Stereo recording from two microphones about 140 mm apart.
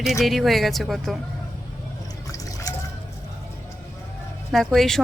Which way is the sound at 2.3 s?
25° left (ahead or behind).